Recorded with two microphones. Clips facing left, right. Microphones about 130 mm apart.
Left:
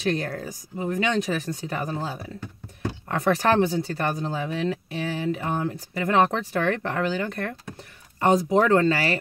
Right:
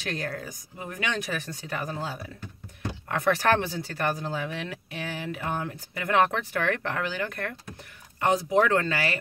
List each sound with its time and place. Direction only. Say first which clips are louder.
0.0 s speech: left 6 dB; 30° left (ahead or behind)